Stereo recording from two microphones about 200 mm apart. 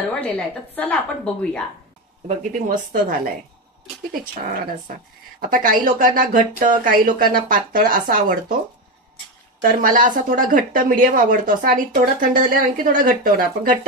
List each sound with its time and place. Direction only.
0.7 s a woman's voice: 5° left (ahead or behind)
2.2 s a woman's voice: 40° right (ahead or behind)
4.2 s a woman's voice: 40° right (ahead or behind)
9.6 s a woman's voice: 45° right (ahead or behind)